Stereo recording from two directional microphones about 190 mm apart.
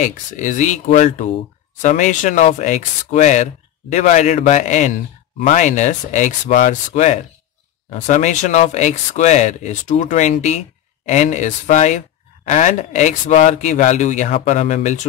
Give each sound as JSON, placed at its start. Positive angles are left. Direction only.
{"t": 0.0, "sound": "speech", "side_deg": 40}